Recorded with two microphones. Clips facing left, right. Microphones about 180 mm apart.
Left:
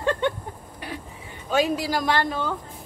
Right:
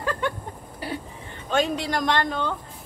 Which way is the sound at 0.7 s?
30° right (ahead or behind).